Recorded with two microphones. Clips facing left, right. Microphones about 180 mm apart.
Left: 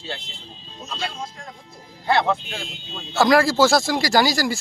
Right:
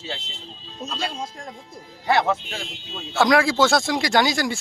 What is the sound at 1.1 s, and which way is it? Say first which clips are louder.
Music: right 2 dB; 50° right (ahead or behind).